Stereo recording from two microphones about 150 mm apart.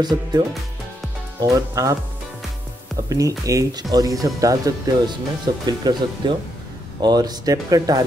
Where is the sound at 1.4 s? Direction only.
20° right (ahead or behind).